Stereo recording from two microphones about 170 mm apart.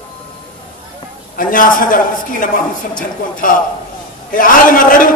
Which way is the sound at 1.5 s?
55° left (ahead or behind).